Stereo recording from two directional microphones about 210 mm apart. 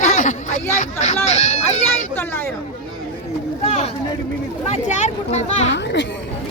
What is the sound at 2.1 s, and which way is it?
Speech, 10° left (ahead or behind).